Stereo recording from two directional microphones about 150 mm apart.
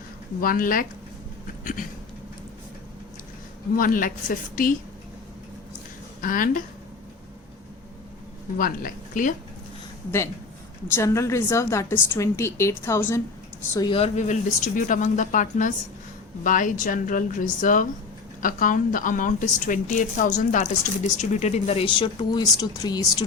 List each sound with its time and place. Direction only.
0.4 s a woman's voice: 70° left (ahead or behind)
1.6 s a sound: 65° left (ahead or behind)
3.8 s a woman's voice: 65° left (ahead or behind)
6.2 s a woman's voice: 65° left (ahead or behind)
8.5 s a woman's voice: 70° left (ahead or behind)
10.9 s a woman's voice: 20° left (ahead or behind)
13.9 s a woman's voice: 45° left (ahead or behind); by 23.2 s 25° left (ahead or behind)